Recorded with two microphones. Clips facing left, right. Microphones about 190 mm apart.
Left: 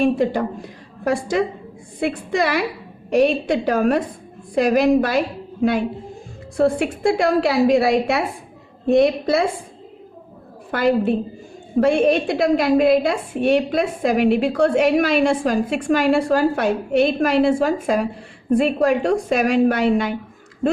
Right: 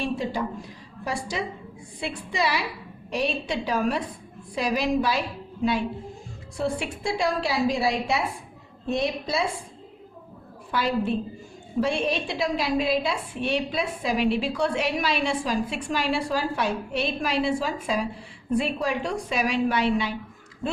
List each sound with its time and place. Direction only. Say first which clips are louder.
0.0 s a woman's voice: left 9 dB; 55° left (ahead or behind)
6.6 s a woman's voice: left 10 dB; 55° left (ahead or behind)
10.7 s a woman's voice: left 7 dB; 55° left (ahead or behind)